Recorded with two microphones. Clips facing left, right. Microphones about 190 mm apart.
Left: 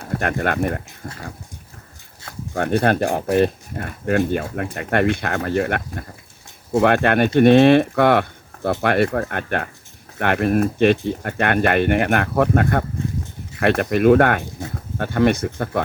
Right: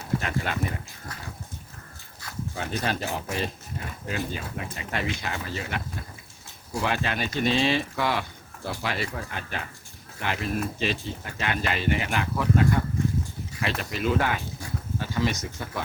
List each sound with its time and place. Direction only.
0.0 s speech: 55° left (ahead or behind)
2.2 s a sound: 25° left (ahead or behind)
2.6 s speech: 55° left (ahead or behind)